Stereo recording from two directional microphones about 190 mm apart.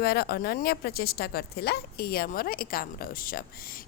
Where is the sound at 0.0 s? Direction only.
55° left (ahead or behind).